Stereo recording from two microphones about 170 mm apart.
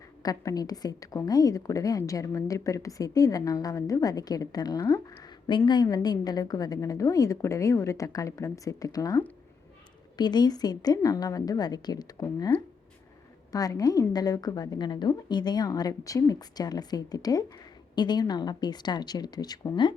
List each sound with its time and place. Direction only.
0.2 s a woman's voice: 20° left (ahead or behind)